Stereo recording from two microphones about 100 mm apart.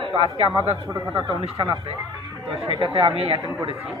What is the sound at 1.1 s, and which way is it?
Speech, 60° right (ahead or behind).